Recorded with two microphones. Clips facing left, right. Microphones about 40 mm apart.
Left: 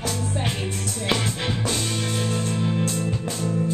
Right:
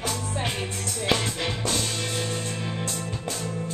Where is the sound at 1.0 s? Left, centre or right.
Centre.